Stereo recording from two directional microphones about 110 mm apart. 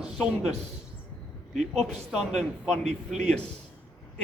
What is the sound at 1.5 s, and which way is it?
Speech, 90° right.